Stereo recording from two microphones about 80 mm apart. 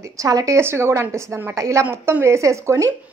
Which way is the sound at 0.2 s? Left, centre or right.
Right.